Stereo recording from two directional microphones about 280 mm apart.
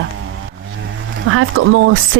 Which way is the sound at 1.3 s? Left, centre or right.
Right.